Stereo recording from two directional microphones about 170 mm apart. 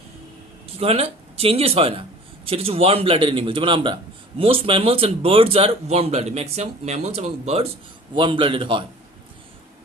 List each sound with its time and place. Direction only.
0.8 s a man's voice: 35° right (ahead or behind)